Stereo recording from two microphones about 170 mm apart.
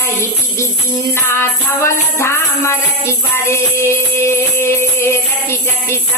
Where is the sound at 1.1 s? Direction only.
15° left (ahead or behind).